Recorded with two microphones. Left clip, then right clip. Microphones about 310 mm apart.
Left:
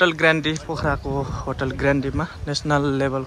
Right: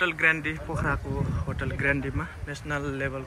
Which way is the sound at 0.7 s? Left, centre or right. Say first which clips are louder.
Left 6 dB; centre.